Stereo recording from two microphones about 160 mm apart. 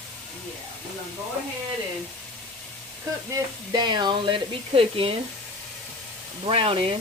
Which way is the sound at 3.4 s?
25° right (ahead or behind).